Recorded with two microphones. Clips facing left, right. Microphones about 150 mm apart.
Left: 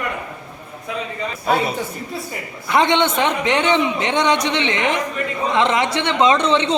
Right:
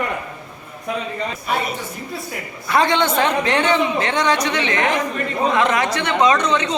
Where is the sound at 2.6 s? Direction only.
20° left (ahead or behind).